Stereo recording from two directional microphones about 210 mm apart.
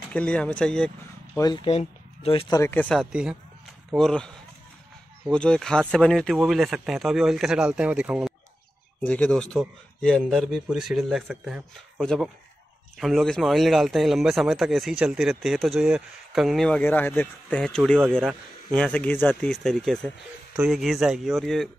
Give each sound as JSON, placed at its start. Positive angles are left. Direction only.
{"t": 0.1, "sound": "speech", "side_deg": 5}
{"t": 1.4, "sound": "speech", "side_deg": 20}
{"t": 2.6, "sound": "a man's voice", "side_deg": 10}
{"t": 5.3, "sound": "a man's voice", "side_deg": 5}
{"t": 9.0, "sound": "a man's voice", "side_deg": 5}